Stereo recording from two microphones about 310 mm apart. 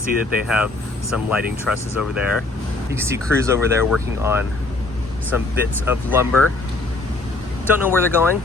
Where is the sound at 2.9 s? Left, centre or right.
Centre.